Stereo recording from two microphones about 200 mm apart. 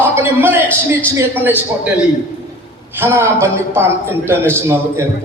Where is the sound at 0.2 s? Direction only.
10° right (ahead or behind).